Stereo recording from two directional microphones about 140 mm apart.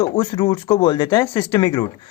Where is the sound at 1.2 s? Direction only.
20° left (ahead or behind).